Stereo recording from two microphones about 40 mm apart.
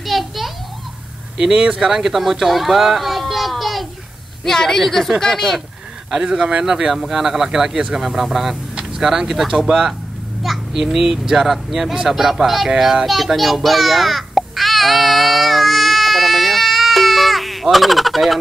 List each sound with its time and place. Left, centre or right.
0.0 s a sound: centre
1.4 s speech: right
2.0 s a child's voice: centre
4.5 s a woman's voice: centre
6.2 s speech: right; by 8.5 s centre
8.7 s speech: centre
12.6 s a sound: centre